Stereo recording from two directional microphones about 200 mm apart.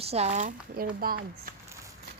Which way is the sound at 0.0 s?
30° right (ahead or behind).